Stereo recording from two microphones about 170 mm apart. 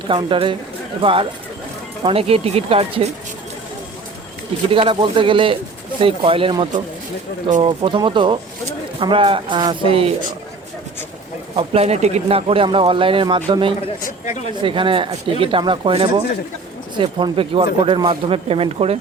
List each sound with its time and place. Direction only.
0.1 s speech: 30° right (ahead or behind)
4.7 s speech: 30° right (ahead or behind)
11.5 s speech: 35° right (ahead or behind)